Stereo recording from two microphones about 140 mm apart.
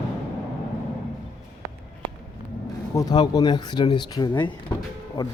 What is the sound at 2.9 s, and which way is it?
Speech, 25° left (ahead or behind).